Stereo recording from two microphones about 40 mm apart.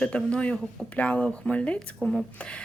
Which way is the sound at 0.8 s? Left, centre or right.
Left.